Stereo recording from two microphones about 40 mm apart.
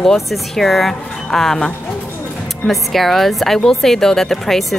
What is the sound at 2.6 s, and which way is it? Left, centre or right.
A woman's voice, centre.